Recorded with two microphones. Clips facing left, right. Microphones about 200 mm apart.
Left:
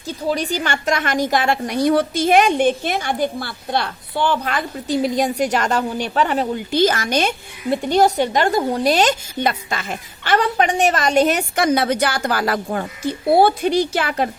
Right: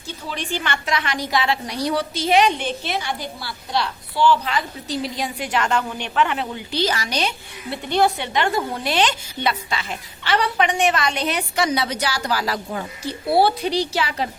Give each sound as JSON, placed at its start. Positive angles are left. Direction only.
{"t": 0.3, "sound": "a woman's voice", "side_deg": 40}